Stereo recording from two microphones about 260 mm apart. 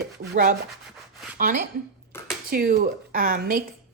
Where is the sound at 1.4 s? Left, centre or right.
Right.